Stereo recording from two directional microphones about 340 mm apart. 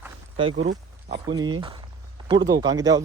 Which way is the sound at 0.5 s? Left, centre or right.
Right.